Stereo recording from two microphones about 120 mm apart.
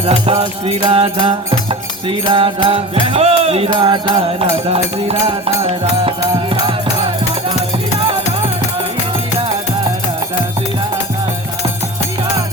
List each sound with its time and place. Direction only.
0.0 s music: 50° right (ahead or behind)
3.7 s music: 40° right (ahead or behind)